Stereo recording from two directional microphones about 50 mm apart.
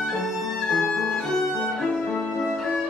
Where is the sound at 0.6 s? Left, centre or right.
Centre.